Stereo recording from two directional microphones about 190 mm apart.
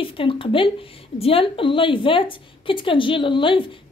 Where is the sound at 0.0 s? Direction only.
30° left (ahead or behind).